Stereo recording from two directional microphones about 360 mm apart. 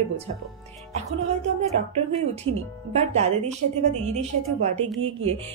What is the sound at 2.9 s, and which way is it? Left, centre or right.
Speech, centre.